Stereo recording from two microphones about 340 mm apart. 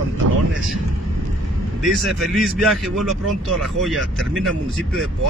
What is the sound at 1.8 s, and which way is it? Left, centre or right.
Speech, centre.